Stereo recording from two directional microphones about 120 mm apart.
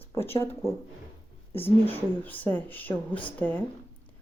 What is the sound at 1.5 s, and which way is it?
Speech, 20° left (ahead or behind).